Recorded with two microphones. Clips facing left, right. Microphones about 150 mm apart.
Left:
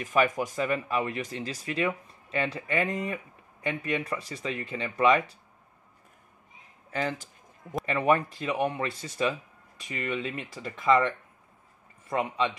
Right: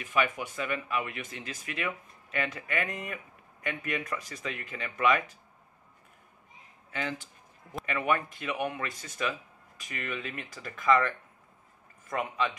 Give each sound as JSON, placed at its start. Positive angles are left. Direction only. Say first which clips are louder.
{"t": 0.0, "sound": "speech", "louder": "left 4 dB", "side_deg": 40}
{"t": 6.9, "sound": "speech", "louder": "left 4 dB", "side_deg": 40}